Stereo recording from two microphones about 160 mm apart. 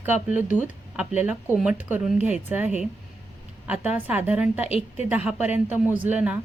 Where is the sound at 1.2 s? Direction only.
10° right (ahead or behind).